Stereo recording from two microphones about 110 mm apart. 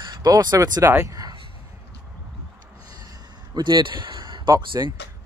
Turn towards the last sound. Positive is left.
turn(degrees=-40)  # may be behind; listen again after turning